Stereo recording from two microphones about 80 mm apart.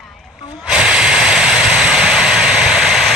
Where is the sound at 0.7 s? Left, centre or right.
Centre.